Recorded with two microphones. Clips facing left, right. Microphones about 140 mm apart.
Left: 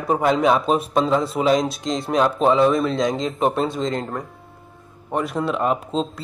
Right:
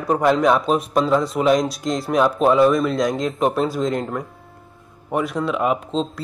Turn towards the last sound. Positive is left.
turn(degrees=0)  # may be behind; listen again after turning